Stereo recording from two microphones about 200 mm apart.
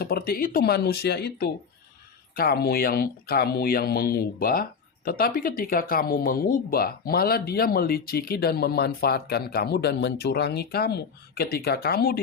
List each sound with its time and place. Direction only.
0.0 s speech: 50° left (ahead or behind)